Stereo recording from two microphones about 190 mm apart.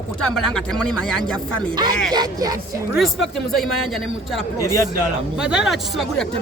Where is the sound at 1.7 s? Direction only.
20° right (ahead or behind).